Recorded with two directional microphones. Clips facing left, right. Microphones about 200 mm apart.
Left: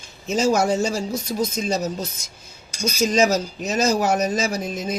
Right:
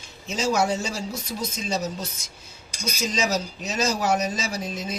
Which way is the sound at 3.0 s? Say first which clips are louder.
Left 7 dB; 50° left (ahead or behind).